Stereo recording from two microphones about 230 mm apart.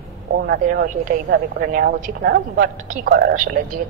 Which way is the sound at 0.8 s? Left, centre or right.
Right.